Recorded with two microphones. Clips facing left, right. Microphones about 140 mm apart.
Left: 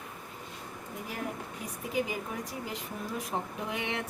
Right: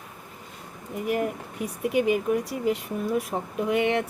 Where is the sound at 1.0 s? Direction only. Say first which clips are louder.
Right 12 dB; 70° right (ahead or behind).